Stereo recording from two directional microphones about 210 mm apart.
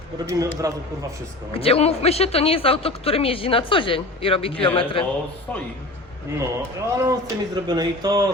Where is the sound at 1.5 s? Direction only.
30° left (ahead or behind).